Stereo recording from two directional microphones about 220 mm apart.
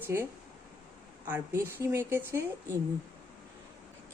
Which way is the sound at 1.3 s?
10° right (ahead or behind).